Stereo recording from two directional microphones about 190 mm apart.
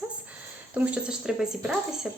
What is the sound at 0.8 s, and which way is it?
A woman's voice, 5° right (ahead or behind).